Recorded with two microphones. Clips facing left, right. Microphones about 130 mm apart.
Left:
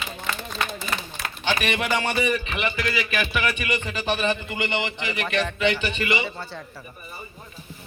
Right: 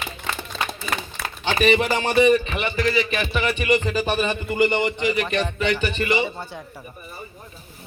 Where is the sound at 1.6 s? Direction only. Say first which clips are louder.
Right 9 dB; 35° right (ahead or behind).